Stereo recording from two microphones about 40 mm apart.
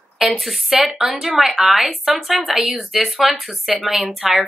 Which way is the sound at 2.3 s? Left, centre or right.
Centre.